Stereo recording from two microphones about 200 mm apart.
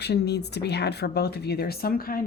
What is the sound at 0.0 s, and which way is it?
A woman's voice, 55° left (ahead or behind).